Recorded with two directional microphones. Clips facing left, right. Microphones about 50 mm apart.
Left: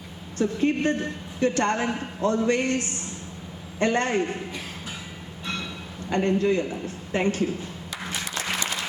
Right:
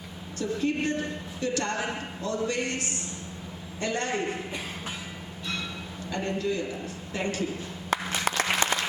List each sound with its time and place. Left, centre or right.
0.3 s a woman's voice: left
6.1 s a woman's voice: left
7.9 s applause: right